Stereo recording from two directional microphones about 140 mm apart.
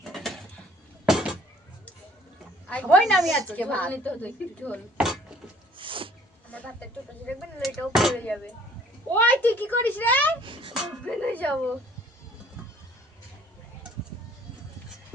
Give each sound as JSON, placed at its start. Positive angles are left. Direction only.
{"t": 0.0, "sound": "a sound", "side_deg": 0}
{"t": 2.6, "sound": "a woman's voice", "side_deg": 10}
{"t": 3.0, "sound": "speech", "side_deg": -5}
{"t": 3.5, "sound": "a woman's voice", "side_deg": 10}
{"t": 4.9, "sound": "dishes", "side_deg": 0}
{"t": 5.7, "sound": "a sound", "side_deg": -40}
{"t": 6.5, "sound": "a sound", "side_deg": 10}
{"t": 7.3, "sound": "speech", "side_deg": 0}
{"t": 9.1, "sound": "a woman's voice", "side_deg": 10}
{"t": 10.4, "sound": "a child's voice", "side_deg": -35}
{"t": 11.0, "sound": "a woman's voice", "side_deg": 10}